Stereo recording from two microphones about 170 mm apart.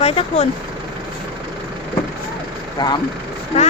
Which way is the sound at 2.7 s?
25° left (ahead or behind).